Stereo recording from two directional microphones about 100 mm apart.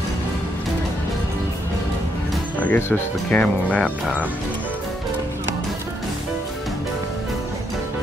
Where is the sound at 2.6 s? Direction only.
15° left (ahead or behind).